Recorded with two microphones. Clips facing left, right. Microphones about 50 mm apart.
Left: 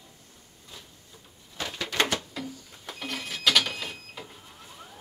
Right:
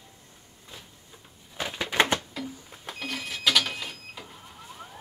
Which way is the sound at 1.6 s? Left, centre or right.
Centre.